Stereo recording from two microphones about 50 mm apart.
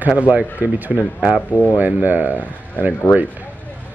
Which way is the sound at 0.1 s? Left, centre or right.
Right.